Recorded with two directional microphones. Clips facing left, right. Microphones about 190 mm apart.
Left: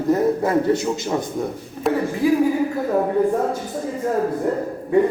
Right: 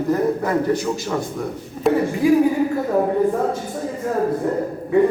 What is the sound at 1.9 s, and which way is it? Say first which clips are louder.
Speech: right 3 dB; centre (ahead or behind).